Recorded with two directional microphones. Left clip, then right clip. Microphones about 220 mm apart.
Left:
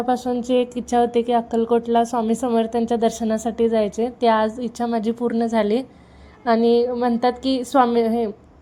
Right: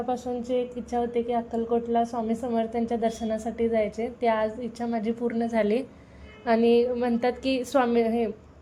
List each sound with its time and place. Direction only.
0.0 s a woman's voice: 30° left (ahead or behind)